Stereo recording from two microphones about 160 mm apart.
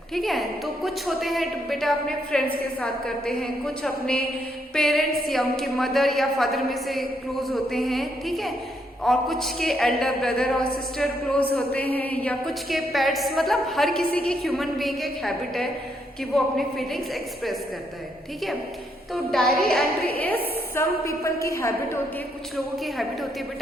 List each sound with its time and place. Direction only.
0.1 s a woman's voice: centre (ahead or behind)
19.1 s a woman's voice: centre (ahead or behind)
20.1 s a woman's voice: 10° left (ahead or behind)
22.5 s a woman's voice: centre (ahead or behind)